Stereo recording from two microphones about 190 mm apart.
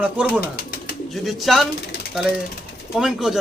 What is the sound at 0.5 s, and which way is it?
Bird, 50° left (ahead or behind).